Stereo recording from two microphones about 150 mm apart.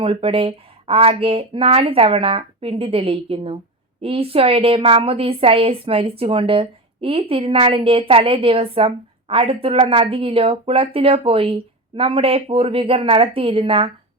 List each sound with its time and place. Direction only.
0.0 s a woman's voice: 40° right (ahead or behind)